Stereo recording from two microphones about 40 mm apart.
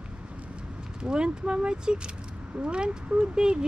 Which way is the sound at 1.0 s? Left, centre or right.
Right.